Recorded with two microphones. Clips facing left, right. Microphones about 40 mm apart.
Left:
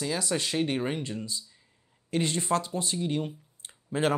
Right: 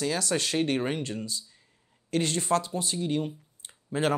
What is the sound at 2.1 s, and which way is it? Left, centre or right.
Speech, left.